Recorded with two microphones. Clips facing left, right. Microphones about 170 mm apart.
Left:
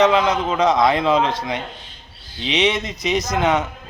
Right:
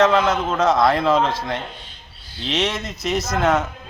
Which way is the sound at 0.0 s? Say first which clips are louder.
Left 1 dB; centre (ahead or behind).